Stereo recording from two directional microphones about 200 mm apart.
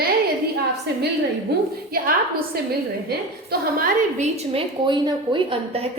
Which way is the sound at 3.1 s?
50° right (ahead or behind).